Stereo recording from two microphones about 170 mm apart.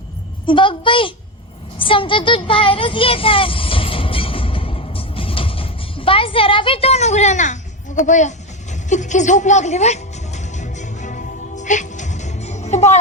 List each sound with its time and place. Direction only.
0.4 s a woman's voice: 30° left (ahead or behind)
1.8 s child singing: 30° left (ahead or behind); by 8.3 s 45° left (ahead or behind)
8.7 s music: 45° left (ahead or behind)